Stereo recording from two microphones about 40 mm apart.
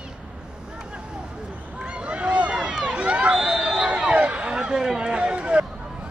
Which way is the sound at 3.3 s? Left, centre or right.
Centre.